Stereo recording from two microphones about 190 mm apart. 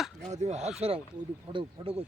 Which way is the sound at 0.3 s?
35° right (ahead or behind).